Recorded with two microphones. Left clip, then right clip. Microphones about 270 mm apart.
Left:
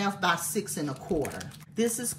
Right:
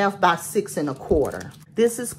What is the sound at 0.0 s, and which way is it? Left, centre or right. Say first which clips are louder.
Speech: right 8 dB; centre.